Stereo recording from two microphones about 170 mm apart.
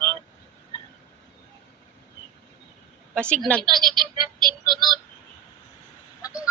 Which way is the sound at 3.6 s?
25° right (ahead or behind).